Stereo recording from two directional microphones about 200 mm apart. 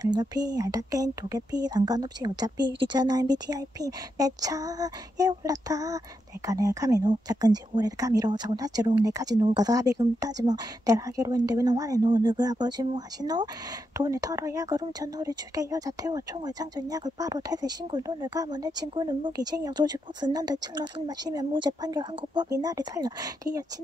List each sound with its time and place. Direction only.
0.0 s speech: 20° right (ahead or behind)